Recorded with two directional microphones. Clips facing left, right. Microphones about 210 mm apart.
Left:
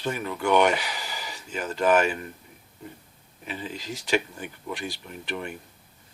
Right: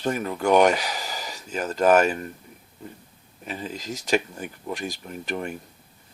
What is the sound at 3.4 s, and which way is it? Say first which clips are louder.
Speech: right 2 dB; 40° right (ahead or behind).